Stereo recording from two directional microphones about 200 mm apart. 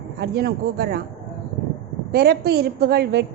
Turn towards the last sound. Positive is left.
turn(degrees=-55)  # may be behind; listen again after turning